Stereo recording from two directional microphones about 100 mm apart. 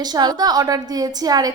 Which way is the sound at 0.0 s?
45° right (ahead or behind).